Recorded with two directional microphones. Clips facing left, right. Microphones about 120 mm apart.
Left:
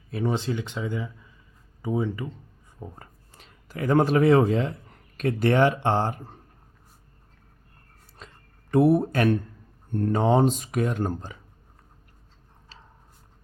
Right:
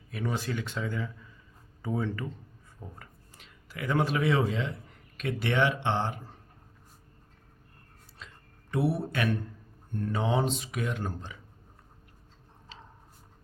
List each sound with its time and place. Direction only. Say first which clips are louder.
0.1 s speech: left 6 dB; 30° left (ahead or behind)
3.3 s speech: left 7 dB; 40° left (ahead or behind)
8.2 s a sound: left 2 dB; 45° left (ahead or behind)
8.7 s speech: left 9 dB; 50° left (ahead or behind)